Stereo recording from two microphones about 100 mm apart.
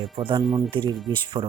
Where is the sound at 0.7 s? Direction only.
45° right (ahead or behind).